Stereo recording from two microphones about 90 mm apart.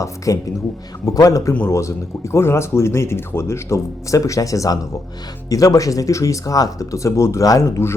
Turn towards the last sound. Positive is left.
turn(degrees=35)  # may be behind; listen again after turning